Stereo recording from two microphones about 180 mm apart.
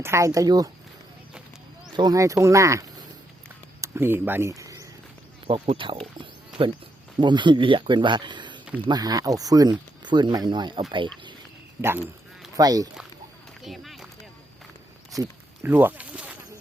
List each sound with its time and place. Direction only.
0.0 s speech: 15° right (ahead or behind)
2.0 s speech: 20° right (ahead or behind)
5.6 s speech: 30° right (ahead or behind)
7.2 s speech: 25° right (ahead or behind)
11.8 s speech: 15° right (ahead or behind)
13.6 s run: centre (ahead or behind)
15.1 s a sound: 15° right (ahead or behind)